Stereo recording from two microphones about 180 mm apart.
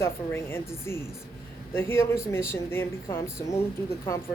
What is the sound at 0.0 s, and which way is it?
Speech, 15° left (ahead or behind).